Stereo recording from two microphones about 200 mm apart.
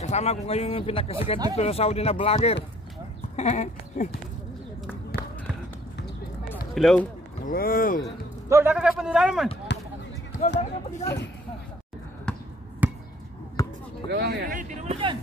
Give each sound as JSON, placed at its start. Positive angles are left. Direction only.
{"t": 0.0, "sound": "speech", "side_deg": 35}
{"t": 5.1, "sound": "basketball bounce", "side_deg": 50}
{"t": 6.7, "sound": "speech", "side_deg": 0}
{"t": 7.4, "sound": "speech", "side_deg": 45}
{"t": 8.5, "sound": "a man's voice", "side_deg": -15}
{"t": 9.7, "sound": "basketball bounce", "side_deg": 60}
{"t": 11.0, "sound": "speech", "side_deg": 35}
{"t": 12.3, "sound": "basketball bounce", "side_deg": 5}
{"t": 12.8, "sound": "basketball bounce", "side_deg": -5}
{"t": 13.6, "sound": "basketball bounce", "side_deg": 15}
{"t": 14.0, "sound": "speech", "side_deg": -55}